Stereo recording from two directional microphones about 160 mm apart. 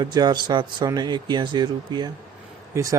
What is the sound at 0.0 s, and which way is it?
Speech, 25° right (ahead or behind).